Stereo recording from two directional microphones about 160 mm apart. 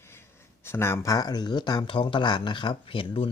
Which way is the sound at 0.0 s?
15° left (ahead or behind).